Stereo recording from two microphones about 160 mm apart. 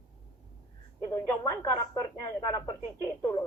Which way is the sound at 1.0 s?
20° left (ahead or behind).